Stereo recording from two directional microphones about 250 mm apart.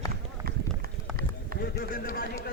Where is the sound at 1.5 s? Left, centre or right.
Left.